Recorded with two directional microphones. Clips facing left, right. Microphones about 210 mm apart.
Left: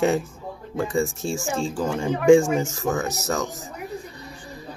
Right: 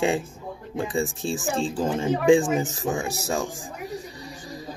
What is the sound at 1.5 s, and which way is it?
Speech, 20° right (ahead or behind).